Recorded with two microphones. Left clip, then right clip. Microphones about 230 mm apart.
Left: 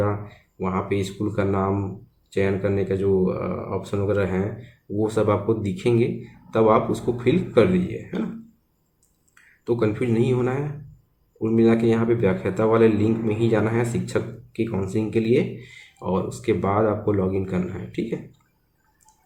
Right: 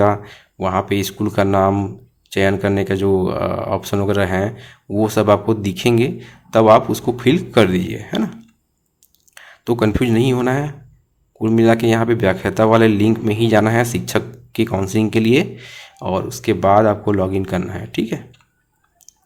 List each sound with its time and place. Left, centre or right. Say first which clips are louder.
0.0 s speech: right 10 dB; right
9.3 s speech: right 4 dB; right